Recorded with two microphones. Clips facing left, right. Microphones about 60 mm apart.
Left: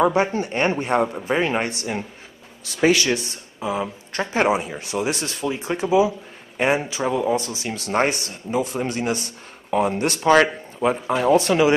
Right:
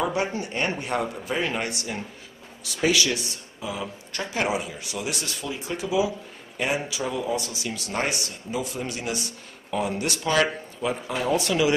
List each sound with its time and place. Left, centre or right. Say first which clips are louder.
0.0 s speech: left 7 dB; left